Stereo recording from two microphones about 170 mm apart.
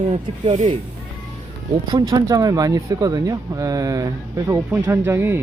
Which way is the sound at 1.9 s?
25° right (ahead or behind).